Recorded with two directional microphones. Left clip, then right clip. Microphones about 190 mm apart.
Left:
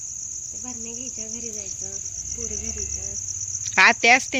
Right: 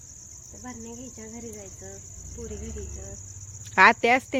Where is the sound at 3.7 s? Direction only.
5° right (ahead or behind).